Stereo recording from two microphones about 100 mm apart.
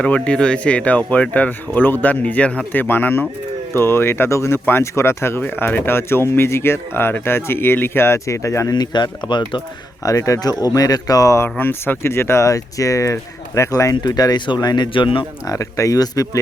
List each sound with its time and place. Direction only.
0.0 s speech: 10° left (ahead or behind); by 8.7 s 30° left (ahead or behind)
8.7 s speech: 45° left (ahead or behind)
10.0 s speech: 35° left (ahead or behind)
11.4 s speech: 20° left (ahead or behind); by 15.3 s 55° left (ahead or behind)
15.4 s speech: 35° left (ahead or behind)